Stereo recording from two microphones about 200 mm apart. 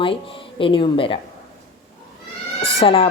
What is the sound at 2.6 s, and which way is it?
Speech, 25° left (ahead or behind).